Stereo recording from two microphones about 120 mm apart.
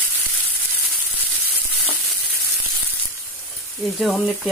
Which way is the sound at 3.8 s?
Centre (ahead or behind).